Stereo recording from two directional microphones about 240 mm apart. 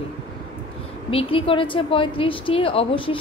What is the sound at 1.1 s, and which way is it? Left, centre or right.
A woman's voice, left.